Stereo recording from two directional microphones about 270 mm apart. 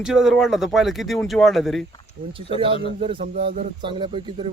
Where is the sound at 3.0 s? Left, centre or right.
Centre.